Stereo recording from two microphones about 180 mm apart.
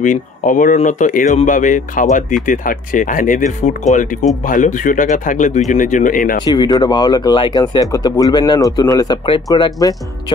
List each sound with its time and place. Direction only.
0.0 s speech: 45° left (ahead or behind)
6.4 s speech: 25° left (ahead or behind)